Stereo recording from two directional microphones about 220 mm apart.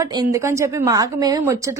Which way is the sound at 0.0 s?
15° right (ahead or behind).